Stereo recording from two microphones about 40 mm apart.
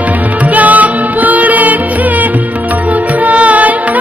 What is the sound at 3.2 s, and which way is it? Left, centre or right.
Music, right.